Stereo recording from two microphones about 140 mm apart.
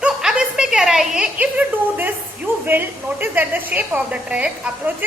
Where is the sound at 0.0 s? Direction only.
5° right (ahead or behind).